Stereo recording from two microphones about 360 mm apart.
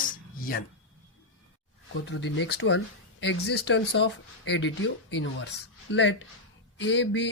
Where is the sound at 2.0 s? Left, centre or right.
Left.